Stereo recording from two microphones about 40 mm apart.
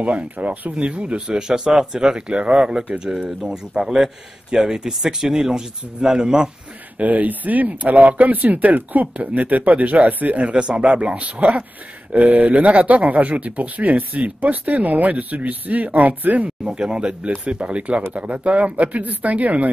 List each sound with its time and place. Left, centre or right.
0.0 s speech: right
7.0 s speech: right
16.4 s speech: right